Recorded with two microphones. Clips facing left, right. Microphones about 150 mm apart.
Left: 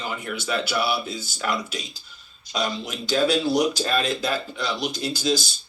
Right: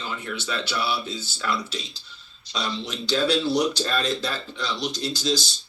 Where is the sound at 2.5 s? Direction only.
50° left (ahead or behind).